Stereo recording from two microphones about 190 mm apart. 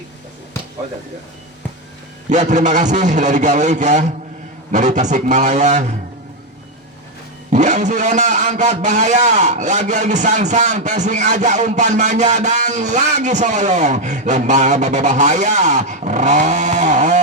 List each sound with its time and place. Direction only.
2.3 s a man's voice: 40° right (ahead or behind)
7.5 s a man's voice: 40° right (ahead or behind)